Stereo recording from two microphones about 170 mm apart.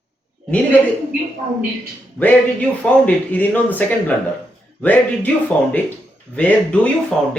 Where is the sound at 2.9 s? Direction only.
10° left (ahead or behind).